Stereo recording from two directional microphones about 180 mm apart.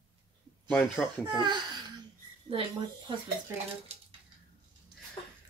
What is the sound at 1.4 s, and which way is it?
Speech, 25° right (ahead or behind).